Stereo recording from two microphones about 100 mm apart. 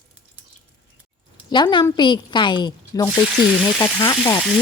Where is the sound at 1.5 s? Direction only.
50° left (ahead or behind).